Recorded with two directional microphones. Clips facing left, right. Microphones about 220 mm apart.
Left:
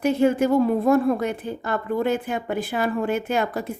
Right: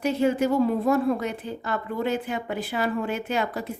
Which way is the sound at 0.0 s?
50° left (ahead or behind).